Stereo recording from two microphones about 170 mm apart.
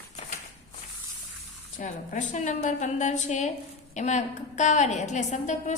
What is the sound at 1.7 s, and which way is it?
A woman's voice, 45° left (ahead or behind).